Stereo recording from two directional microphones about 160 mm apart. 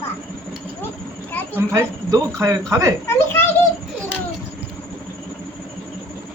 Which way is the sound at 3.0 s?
15° left (ahead or behind).